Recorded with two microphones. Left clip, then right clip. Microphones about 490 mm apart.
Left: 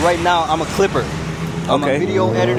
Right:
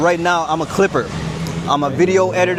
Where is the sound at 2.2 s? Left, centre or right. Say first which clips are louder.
Right 2 dB; right.